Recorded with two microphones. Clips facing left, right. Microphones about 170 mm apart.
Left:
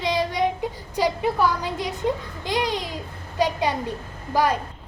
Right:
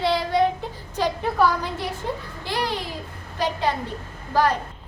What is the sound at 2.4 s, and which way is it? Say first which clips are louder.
A woman's voice: left 2 dB; 15° left (ahead or behind).